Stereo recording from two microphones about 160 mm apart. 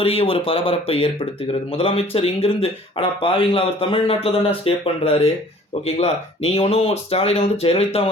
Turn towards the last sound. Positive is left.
turn(degrees=40)  # may be behind; listen again after turning